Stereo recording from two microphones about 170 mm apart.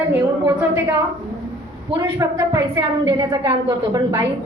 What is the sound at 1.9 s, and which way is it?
A woman's voice, 25° right (ahead or behind).